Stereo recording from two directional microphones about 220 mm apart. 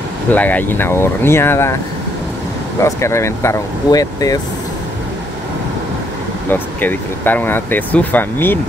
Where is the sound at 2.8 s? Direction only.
10° left (ahead or behind).